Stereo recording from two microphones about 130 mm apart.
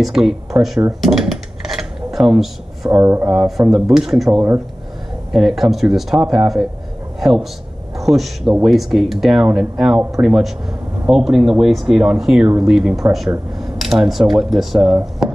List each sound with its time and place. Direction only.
0.0 s speech: 5° right (ahead or behind)
1.0 s dishes: centre (ahead or behind)
2.9 s speech: 20° right (ahead or behind)
3.3 s a man's voice: 5° right (ahead or behind)
15.0 s a sound: 10° right (ahead or behind)